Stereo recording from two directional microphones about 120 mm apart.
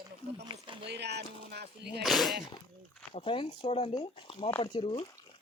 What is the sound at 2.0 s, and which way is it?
Speech, centre (ahead or behind).